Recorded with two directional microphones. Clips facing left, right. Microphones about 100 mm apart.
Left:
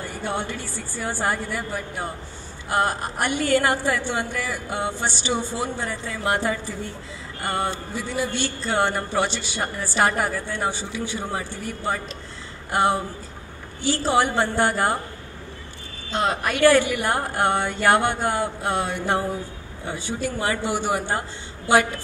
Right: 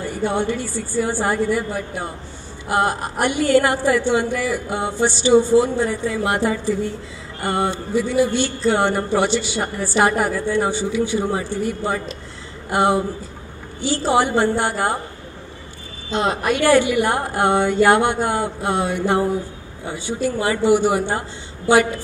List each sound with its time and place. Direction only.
0.2 s a woman's voice: 20° right (ahead or behind)
2.7 s a woman's voice: 20° right (ahead or behind)
16.1 s a woman's voice: 20° right (ahead or behind)